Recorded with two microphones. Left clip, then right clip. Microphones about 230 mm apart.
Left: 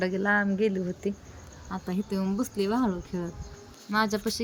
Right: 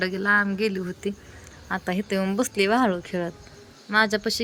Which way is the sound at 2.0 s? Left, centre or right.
Centre.